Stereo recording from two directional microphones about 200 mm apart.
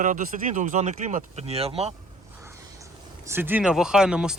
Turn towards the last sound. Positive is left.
turn(degrees=-5)  # may be behind; listen again after turning